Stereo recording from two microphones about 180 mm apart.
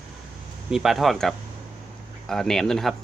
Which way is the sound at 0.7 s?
Centre (ahead or behind).